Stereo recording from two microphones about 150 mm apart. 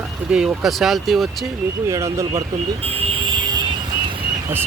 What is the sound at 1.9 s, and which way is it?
Speech, 20° right (ahead or behind).